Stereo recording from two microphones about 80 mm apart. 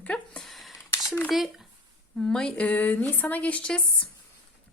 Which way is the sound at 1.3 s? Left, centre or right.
Centre.